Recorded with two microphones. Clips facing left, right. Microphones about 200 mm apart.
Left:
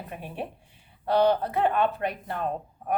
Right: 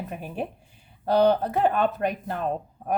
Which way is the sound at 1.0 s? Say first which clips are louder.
Right 2 dB; 40° right (ahead or behind).